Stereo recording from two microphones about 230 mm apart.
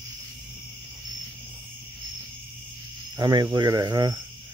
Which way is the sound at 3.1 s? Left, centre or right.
Centre.